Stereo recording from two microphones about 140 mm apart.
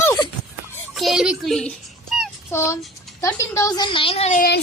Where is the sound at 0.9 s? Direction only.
Centre (ahead or behind).